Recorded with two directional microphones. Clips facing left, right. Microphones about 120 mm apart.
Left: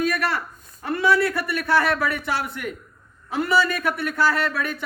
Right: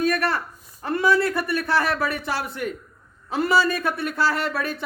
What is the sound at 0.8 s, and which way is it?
Speech, 25° right (ahead or behind).